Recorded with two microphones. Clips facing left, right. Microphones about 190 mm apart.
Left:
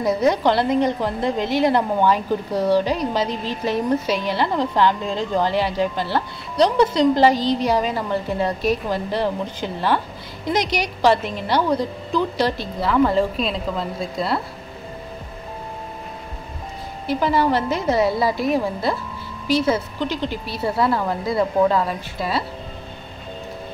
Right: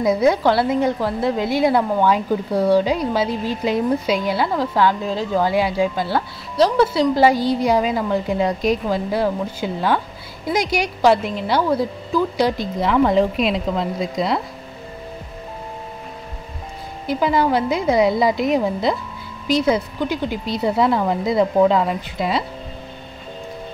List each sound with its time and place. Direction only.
0.0 s a woman's voice: 10° right (ahead or behind)
12.8 s a woman's voice: centre (ahead or behind)
13.9 s a woman's voice: 15° right (ahead or behind)
17.1 s a woman's voice: 15° right (ahead or behind)